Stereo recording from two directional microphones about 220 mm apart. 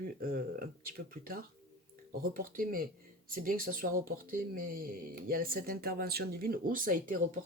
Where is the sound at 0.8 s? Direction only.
40° right (ahead or behind).